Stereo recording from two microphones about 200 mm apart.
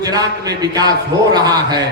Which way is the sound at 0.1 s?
20° right (ahead or behind).